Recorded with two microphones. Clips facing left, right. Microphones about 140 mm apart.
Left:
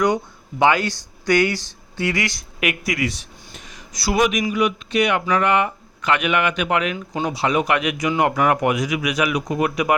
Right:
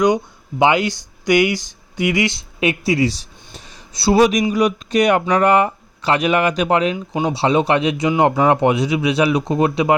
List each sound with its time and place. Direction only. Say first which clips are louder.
0.6 s speech: right 2 dB; 20° right (ahead or behind)
6.9 s speech: right 4 dB; 20° right (ahead or behind)